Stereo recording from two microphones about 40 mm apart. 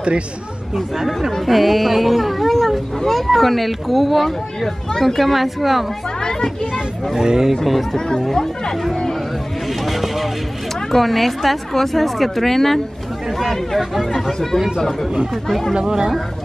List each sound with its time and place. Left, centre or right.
0.7 s speech: centre
5.0 s speech: centre
7.2 s speech: centre
7.6 s speech: centre
9.7 s a sound: centre
10.9 s speech: centre
14.8 s speech: centre
15.7 s speech: centre